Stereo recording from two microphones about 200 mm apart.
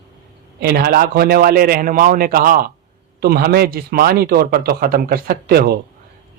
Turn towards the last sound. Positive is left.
turn(degrees=-50)  # may be behind; listen again after turning